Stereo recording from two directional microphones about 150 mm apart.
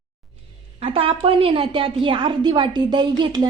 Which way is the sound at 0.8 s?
40° right (ahead or behind).